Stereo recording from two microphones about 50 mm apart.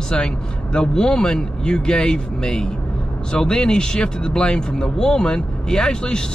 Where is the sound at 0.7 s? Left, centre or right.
Centre.